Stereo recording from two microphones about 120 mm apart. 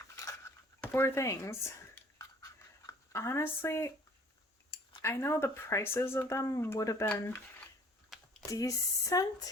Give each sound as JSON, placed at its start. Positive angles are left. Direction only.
{"t": 0.0, "sound": "cutlery", "side_deg": 25}
{"t": 0.8, "sound": "speech", "side_deg": 20}
{"t": 2.1, "sound": "a sound", "side_deg": 30}
{"t": 5.0, "sound": "speech", "side_deg": 20}
{"t": 8.1, "sound": "a sound", "side_deg": 0}
{"t": 8.4, "sound": "speech", "side_deg": 30}